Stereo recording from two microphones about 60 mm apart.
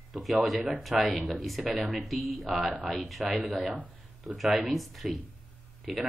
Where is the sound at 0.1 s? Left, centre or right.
Centre.